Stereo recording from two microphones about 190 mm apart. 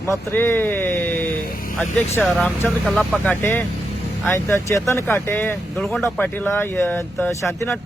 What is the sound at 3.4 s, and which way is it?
A man's voice, 10° left (ahead or behind).